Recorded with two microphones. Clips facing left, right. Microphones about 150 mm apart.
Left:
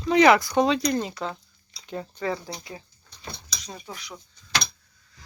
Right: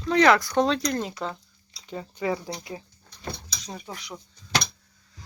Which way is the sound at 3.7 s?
10° right (ahead or behind).